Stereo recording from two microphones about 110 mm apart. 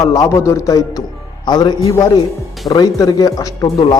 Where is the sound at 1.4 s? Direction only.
40° left (ahead or behind).